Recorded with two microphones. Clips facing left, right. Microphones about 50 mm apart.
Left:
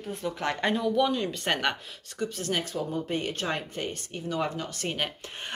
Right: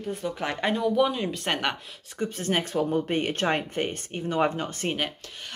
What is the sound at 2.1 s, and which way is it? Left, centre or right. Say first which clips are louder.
Speech: right 3 dB; right.